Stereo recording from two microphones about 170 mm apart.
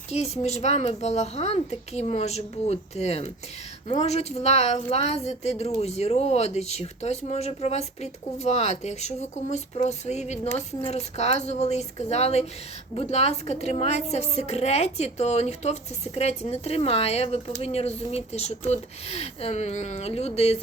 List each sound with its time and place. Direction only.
0.1 s speech: 40° left (ahead or behind)